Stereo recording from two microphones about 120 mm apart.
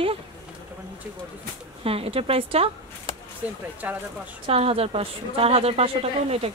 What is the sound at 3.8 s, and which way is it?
Speech, 15° right (ahead or behind).